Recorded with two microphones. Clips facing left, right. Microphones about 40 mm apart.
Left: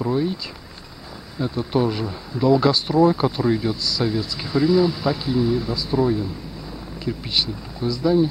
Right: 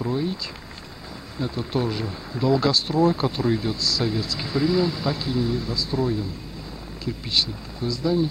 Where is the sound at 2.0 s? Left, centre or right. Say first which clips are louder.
Left 4 dB; centre.